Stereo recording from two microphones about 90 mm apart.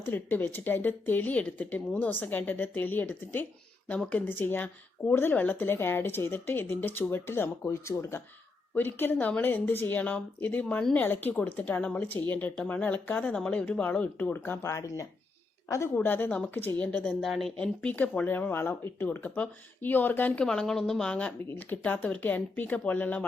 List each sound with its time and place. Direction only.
0.0 s a woman's voice: 25° left (ahead or behind)
16.0 s a woman's voice: 20° left (ahead or behind)
17.2 s speech: centre (ahead or behind)
17.6 s speech: 15° left (ahead or behind)
20.4 s a woman's voice: 5° left (ahead or behind)